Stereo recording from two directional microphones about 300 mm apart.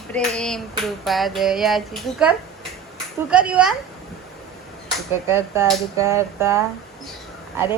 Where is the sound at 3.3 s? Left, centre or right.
Centre.